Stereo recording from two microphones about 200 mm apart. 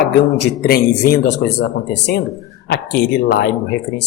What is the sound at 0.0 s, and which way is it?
A woman's voice, 55° left (ahead or behind).